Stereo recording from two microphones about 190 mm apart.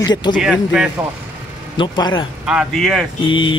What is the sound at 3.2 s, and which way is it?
Speech, 25° left (ahead or behind).